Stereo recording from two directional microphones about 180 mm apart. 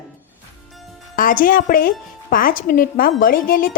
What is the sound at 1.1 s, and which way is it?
A woman's voice, 50° left (ahead or behind).